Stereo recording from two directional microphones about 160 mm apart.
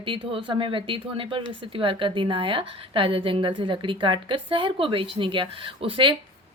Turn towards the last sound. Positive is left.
turn(degrees=-35)  # may be behind; listen again after turning